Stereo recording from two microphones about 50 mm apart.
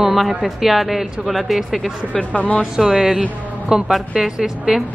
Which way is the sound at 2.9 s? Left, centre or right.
Centre.